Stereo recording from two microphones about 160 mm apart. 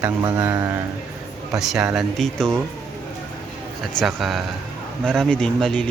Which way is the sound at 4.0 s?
Centre (ahead or behind).